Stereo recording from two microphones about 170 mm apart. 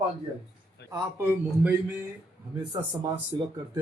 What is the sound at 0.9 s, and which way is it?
A man's voice, 15° right (ahead or behind).